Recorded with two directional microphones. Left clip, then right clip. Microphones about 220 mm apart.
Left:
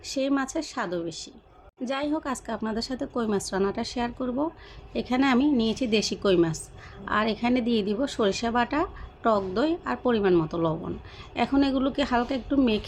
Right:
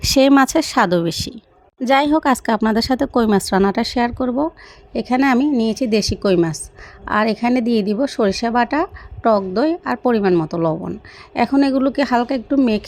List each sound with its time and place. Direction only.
0.0 s a woman's voice: 40° right (ahead or behind)